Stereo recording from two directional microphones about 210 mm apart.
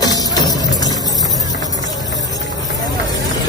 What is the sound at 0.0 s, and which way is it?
Music, 15° left (ahead or behind).